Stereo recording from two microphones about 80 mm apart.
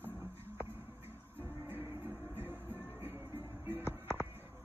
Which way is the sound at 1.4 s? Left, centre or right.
Right.